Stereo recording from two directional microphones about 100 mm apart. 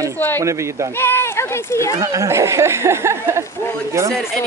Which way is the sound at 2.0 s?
35° right (ahead or behind).